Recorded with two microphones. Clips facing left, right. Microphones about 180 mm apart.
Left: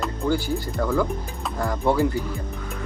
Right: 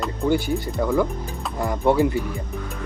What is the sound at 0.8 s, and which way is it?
Speech, 15° right (ahead or behind).